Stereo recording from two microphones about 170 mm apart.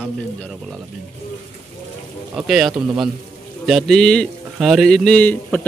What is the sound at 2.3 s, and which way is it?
Speech, 5° right (ahead or behind).